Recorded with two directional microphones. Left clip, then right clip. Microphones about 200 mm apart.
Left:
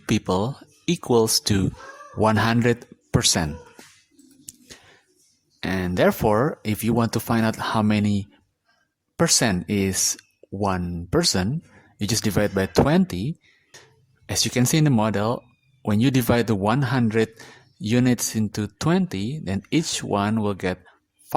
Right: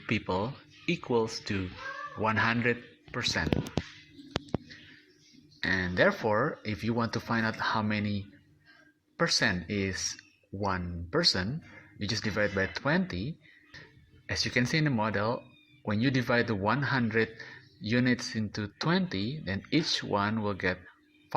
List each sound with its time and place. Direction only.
0.0 s a man's voice: 40° left (ahead or behind)
5.6 s a man's voice: 35° left (ahead or behind)